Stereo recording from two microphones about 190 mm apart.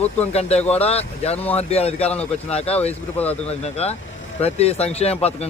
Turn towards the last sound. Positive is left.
turn(degrees=35)  # may be behind; listen again after turning